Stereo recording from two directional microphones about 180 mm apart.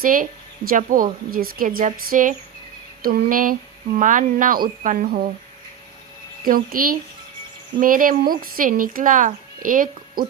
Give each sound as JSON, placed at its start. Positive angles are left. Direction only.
{"t": 0.0, "sound": "speech", "side_deg": -50}
{"t": 6.4, "sound": "speech", "side_deg": -55}